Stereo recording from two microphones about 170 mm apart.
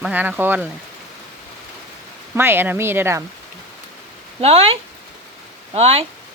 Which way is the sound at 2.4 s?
15° right (ahead or behind).